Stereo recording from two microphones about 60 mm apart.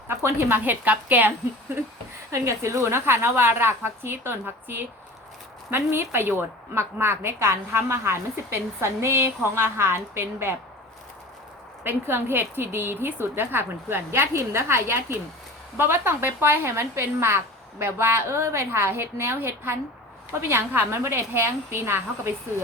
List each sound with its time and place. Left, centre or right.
0.1 s speech: right
2.3 s a woman's voice: right
11.8 s a woman's voice: right